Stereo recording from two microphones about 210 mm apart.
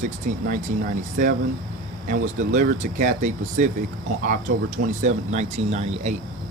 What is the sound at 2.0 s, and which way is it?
Speech, 35° right (ahead or behind).